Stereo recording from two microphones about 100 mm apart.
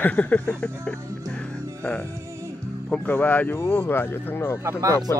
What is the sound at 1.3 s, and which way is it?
Music, 10° left (ahead or behind).